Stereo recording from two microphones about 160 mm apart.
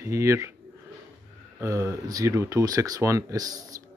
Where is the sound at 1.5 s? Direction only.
20° right (ahead or behind).